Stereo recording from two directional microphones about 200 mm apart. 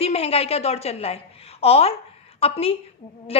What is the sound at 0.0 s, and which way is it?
A woman's voice, 30° left (ahead or behind).